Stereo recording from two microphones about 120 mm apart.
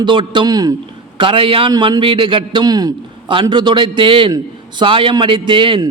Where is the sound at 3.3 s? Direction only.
45° right (ahead or behind).